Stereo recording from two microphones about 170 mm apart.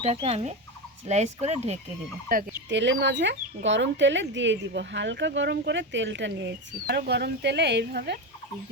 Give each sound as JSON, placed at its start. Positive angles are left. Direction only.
{"t": 0.0, "sound": "speech", "side_deg": -40}
{"t": 2.3, "sound": "fowl", "side_deg": -55}
{"t": 2.6, "sound": "speech", "side_deg": -90}